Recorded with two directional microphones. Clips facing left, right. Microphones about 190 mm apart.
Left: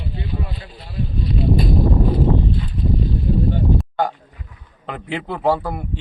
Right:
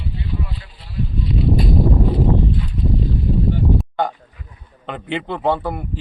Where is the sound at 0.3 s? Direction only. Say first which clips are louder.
Even; 45° left (ahead or behind).